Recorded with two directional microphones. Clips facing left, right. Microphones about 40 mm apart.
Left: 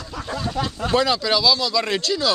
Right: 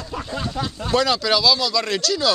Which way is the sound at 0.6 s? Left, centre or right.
Left.